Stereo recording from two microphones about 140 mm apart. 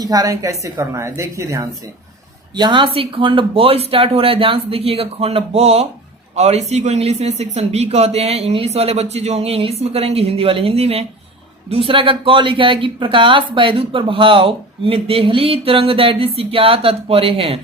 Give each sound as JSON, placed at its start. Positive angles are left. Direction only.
{"t": 0.0, "sound": "a woman's voice", "side_deg": -25}
{"t": 2.6, "sound": "speech", "side_deg": -35}